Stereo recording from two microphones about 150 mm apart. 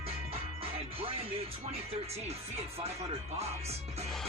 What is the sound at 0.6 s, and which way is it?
Music, 40° right (ahead or behind).